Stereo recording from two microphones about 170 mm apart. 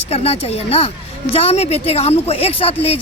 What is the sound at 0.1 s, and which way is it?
Speech, 35° left (ahead or behind).